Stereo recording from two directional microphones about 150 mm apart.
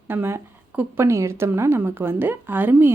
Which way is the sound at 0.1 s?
15° right (ahead or behind).